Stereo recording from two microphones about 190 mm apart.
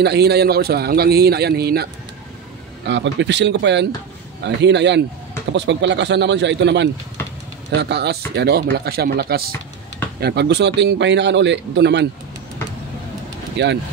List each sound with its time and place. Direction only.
0.0 s speech: 60° right (ahead or behind)
2.9 s speech: 70° right (ahead or behind)
13.6 s speech: 65° right (ahead or behind)